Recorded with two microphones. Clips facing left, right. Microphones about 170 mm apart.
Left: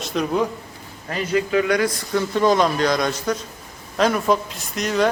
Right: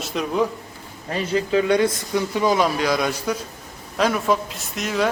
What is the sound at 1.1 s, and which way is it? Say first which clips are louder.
Speech: even; 30° right (ahead or behind).